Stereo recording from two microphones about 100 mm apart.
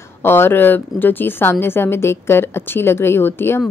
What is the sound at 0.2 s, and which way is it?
A woman's voice, 25° left (ahead or behind).